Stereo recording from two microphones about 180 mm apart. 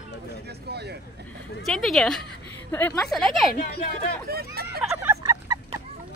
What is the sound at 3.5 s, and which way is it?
Speech, 55° left (ahead or behind).